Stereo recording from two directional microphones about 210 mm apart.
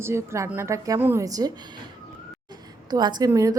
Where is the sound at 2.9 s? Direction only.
20° right (ahead or behind).